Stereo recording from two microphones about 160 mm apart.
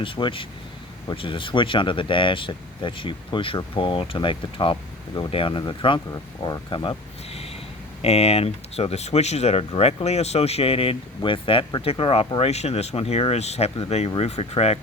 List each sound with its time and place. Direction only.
0.0 s speech: 30° left (ahead or behind)
8.0 s speech: 40° left (ahead or behind)